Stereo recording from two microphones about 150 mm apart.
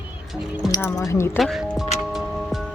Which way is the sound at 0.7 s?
20° left (ahead or behind).